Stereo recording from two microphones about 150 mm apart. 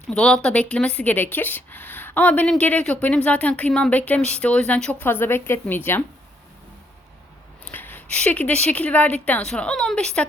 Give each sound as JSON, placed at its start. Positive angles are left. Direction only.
{"t": 0.1, "sound": "speech", "side_deg": 5}
{"t": 7.6, "sound": "speech", "side_deg": 15}